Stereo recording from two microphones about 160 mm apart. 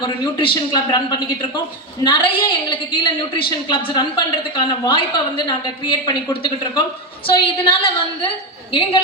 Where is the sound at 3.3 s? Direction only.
30° left (ahead or behind).